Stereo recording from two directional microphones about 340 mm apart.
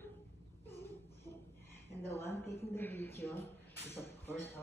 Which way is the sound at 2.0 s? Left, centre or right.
Centre.